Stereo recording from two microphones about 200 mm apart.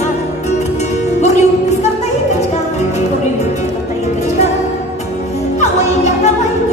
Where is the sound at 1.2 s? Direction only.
35° left (ahead or behind).